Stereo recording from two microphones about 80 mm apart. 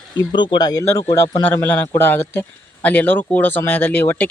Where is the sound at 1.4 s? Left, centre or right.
Left.